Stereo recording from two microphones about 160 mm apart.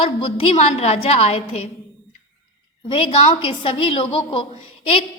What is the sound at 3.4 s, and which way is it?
A woman's voice, 35° left (ahead or behind).